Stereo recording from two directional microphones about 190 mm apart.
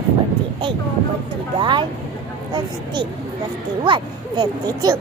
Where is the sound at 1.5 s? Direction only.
25° right (ahead or behind).